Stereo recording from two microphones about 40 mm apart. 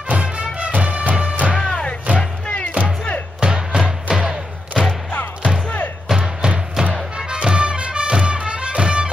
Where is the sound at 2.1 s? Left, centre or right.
Left.